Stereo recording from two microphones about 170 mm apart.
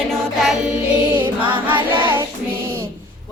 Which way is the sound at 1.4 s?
30° right (ahead or behind).